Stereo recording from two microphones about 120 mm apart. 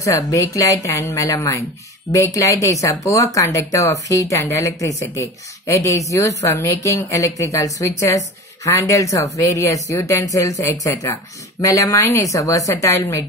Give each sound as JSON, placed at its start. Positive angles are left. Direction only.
{"t": 0.0, "sound": "speech", "side_deg": 25}